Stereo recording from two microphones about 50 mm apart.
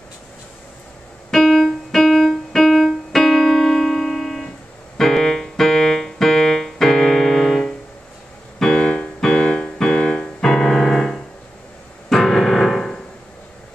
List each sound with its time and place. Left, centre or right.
1.3 s keyboard: centre
8.5 s piano: centre